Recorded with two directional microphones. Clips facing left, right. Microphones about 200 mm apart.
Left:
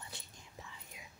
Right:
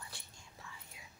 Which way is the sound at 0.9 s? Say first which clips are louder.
Left 3 dB; 20° left (ahead or behind).